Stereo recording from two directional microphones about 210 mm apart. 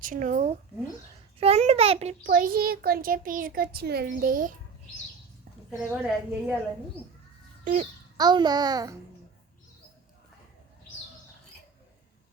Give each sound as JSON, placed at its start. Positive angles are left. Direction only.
{"t": 0.0, "sound": "a child's voice", "side_deg": -40}
{"t": 5.9, "sound": "a woman's voice", "side_deg": -10}
{"t": 7.6, "sound": "speech", "side_deg": -35}
{"t": 8.2, "sound": "a child's voice", "side_deg": -20}